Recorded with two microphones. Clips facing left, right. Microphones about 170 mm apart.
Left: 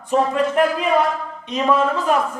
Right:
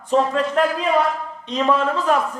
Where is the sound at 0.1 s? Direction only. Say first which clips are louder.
Even; 15° left (ahead or behind).